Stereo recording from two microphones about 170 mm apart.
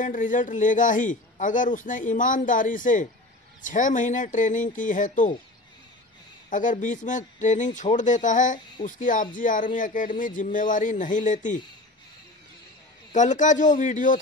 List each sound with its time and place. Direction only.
0.0 s a man's voice: 50° left (ahead or behind)
6.5 s a man's voice: 50° left (ahead or behind)
13.1 s a man's voice: 45° left (ahead or behind)